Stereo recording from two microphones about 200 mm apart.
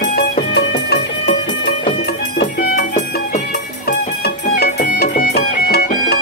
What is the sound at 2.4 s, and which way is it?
Music, 50° left (ahead or behind).